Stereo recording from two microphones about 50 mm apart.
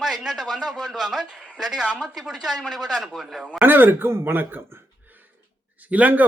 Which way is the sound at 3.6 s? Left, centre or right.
Right.